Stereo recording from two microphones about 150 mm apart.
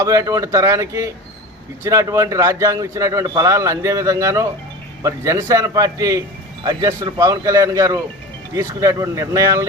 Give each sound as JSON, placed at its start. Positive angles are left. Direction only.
{"t": 0.0, "sound": "a man's voice", "side_deg": -20}